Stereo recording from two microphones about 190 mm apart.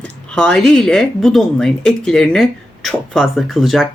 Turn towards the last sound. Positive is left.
turn(degrees=0)  # may be behind; listen again after turning